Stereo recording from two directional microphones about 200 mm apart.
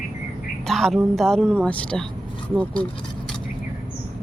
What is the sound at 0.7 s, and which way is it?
Speech, centre (ahead or behind).